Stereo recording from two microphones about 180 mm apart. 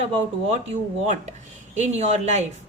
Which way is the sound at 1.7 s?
40° right (ahead or behind).